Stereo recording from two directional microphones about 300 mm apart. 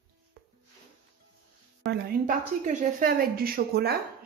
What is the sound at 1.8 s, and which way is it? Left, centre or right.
A woman's voice, right.